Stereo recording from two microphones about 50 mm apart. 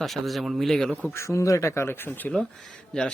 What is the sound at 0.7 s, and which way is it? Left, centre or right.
Speech, centre.